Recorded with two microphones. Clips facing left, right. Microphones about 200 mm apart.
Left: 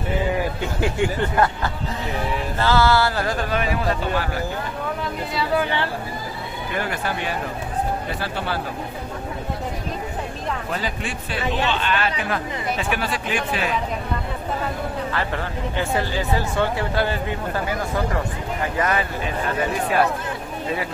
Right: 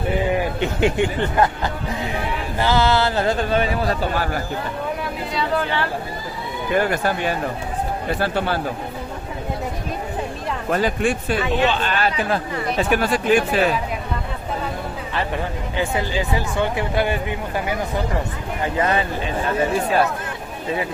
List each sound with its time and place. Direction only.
0.6 s speech: 20° right (ahead or behind)
6.7 s speech: 45° right (ahead or behind)
10.7 s speech: 50° right (ahead or behind)
15.1 s speech: 15° right (ahead or behind)